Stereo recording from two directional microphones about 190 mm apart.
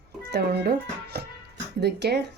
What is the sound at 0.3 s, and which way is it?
A child's voice, 60° right (ahead or behind).